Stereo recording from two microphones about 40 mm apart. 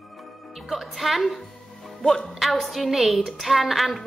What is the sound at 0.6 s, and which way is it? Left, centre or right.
A woman's voice, centre.